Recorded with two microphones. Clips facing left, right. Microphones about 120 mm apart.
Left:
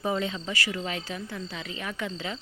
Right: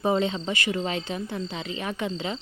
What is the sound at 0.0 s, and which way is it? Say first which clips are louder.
A woman's voice: right 5 dB; 25° right (ahead or behind).